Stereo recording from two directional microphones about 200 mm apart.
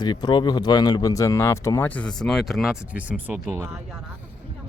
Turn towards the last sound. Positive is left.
turn(degrees=-5)  # may be behind; listen again after turning